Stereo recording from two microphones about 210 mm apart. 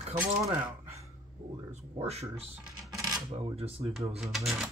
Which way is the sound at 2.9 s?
20° right (ahead or behind).